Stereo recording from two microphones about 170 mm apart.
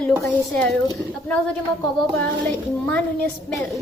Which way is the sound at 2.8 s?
10° left (ahead or behind).